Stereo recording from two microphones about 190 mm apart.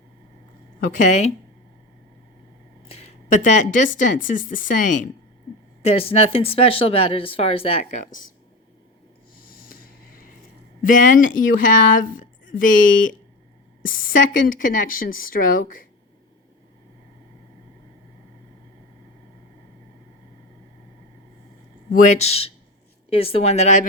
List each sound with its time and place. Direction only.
0.8 s speech: 40° left (ahead or behind)
3.2 s speech: 40° left (ahead or behind)
5.8 s speech: 30° left (ahead or behind)
9.4 s a sound: 50° left (ahead or behind)
10.8 s speech: 45° left (ahead or behind)
21.9 s speech: 35° left (ahead or behind)